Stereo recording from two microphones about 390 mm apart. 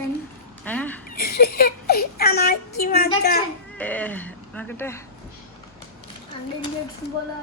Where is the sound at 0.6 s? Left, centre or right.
Centre.